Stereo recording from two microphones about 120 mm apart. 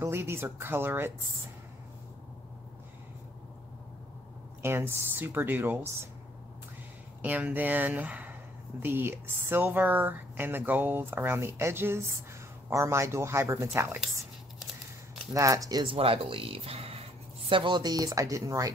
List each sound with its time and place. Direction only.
0.0 s speech: 20° right (ahead or behind)
4.6 s speech: 20° right (ahead or behind)
7.2 s speech: 15° right (ahead or behind)
15.3 s speech: 30° right (ahead or behind)
15.8 s speech: 50° right (ahead or behind)
17.5 s speech: 45° right (ahead or behind)